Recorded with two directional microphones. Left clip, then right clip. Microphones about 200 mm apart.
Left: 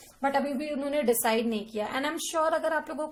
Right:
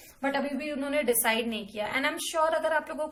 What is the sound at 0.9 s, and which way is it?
A woman's voice, 50° left (ahead or behind).